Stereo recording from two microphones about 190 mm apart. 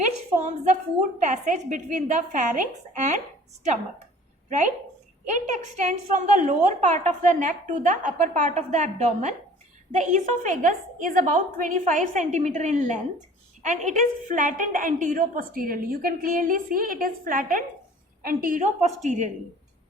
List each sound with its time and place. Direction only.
0.4 s a woman's voice: 35° right (ahead or behind)
4.4 s a woman's voice: 40° right (ahead or behind)